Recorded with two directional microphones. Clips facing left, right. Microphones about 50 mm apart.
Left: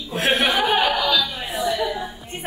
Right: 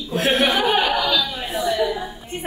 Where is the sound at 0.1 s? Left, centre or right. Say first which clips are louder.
Right 1 dB; left.